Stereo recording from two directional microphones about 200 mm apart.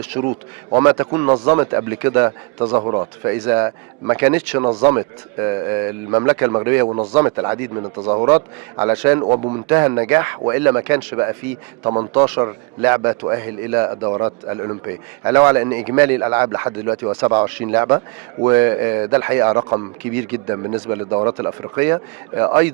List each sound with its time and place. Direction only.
0.1 s a man's voice: 20° right (ahead or behind)
2.6 s a man's voice: 25° right (ahead or behind)
3.2 s a man's voice: 10° right (ahead or behind)
6.8 s a man's voice: 25° right (ahead or behind)
7.1 s a man's voice: 15° right (ahead or behind)
8.8 s a man's voice: 10° right (ahead or behind)
9.2 s a man's voice: 25° right (ahead or behind)
9.6 s a man's voice: 15° right (ahead or behind)
12.2 s a man's voice: 10° right (ahead or behind)